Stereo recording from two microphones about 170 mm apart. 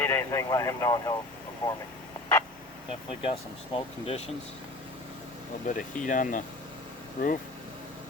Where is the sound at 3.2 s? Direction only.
35° left (ahead or behind).